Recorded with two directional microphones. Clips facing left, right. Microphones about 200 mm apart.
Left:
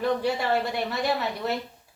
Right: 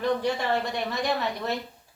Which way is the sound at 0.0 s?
5° left (ahead or behind).